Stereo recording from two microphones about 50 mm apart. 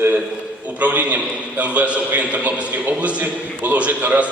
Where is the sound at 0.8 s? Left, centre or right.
Right.